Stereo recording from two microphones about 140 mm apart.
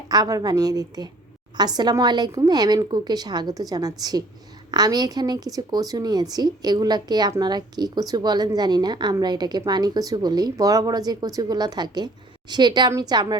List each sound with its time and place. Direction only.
0.1 s a woman's voice: 25° right (ahead or behind)